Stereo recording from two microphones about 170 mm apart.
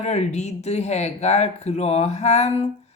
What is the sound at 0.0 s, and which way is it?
Speech, 40° left (ahead or behind).